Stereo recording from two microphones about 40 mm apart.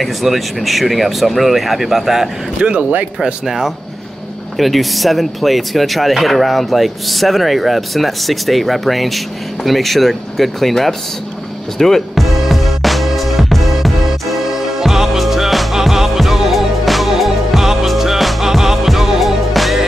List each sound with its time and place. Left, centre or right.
0.0 s speech: centre
2.8 s speech: right
3.4 s speech: centre
12.4 s music: centre